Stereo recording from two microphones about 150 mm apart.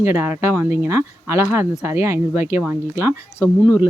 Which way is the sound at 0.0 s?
15° right (ahead or behind).